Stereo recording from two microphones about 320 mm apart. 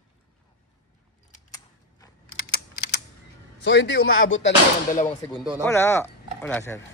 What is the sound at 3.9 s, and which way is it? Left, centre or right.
Speech, left.